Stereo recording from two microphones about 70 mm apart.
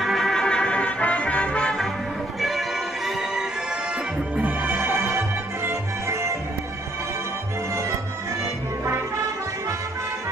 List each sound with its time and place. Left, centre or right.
0.0 s music: centre
3.1 s music: centre
4.4 s music: right